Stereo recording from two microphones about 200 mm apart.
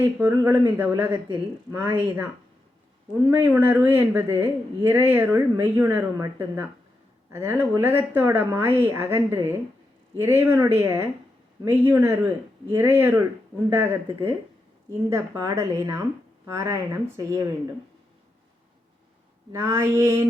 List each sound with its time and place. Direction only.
0.0 s speech: 10° right (ahead or behind)
3.2 s speech: 10° right (ahead or behind)
19.5 s speech: 10° right (ahead or behind)